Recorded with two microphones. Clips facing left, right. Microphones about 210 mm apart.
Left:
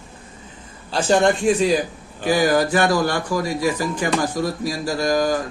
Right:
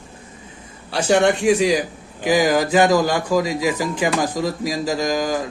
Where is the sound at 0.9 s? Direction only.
70° right (ahead or behind).